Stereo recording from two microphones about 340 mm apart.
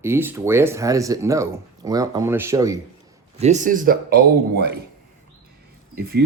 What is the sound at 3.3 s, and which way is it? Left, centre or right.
Speech, centre.